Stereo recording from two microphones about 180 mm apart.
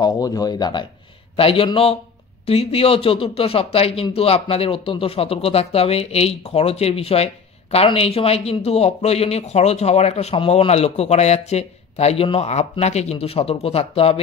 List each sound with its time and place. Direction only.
0.0 s speech: 20° left (ahead or behind)